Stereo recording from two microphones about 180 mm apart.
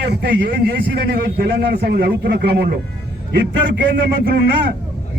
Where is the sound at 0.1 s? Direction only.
65° right (ahead or behind).